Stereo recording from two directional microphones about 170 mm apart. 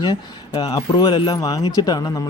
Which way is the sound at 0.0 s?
25° left (ahead or behind).